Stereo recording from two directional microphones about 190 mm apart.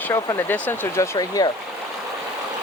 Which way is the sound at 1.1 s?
20° left (ahead or behind).